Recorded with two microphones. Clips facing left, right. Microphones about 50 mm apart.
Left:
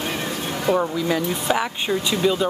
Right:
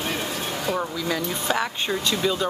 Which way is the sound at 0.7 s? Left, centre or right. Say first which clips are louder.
Left 7 dB; centre.